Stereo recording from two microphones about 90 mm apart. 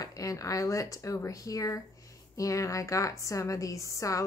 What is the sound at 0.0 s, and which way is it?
Speech, 40° left (ahead or behind).